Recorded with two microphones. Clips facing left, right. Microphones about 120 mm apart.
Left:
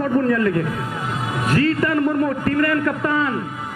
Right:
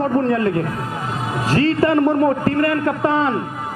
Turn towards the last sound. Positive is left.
turn(degrees=-30)  # may be behind; listen again after turning